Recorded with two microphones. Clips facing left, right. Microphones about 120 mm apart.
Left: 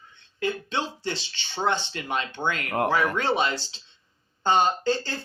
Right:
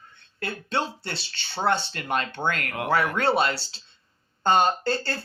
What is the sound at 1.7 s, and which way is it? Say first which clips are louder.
Speech: right 3 dB; 50° right (ahead or behind).